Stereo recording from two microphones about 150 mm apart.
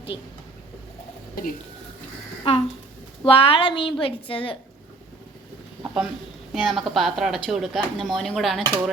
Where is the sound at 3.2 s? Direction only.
35° left (ahead or behind).